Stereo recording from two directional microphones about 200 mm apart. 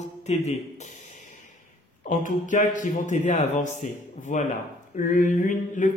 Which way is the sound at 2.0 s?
40° left (ahead or behind).